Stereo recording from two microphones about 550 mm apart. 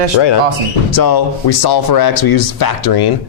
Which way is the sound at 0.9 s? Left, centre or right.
Left.